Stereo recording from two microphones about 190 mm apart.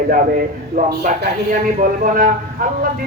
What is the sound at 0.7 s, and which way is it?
A man's voice, 50° right (ahead or behind).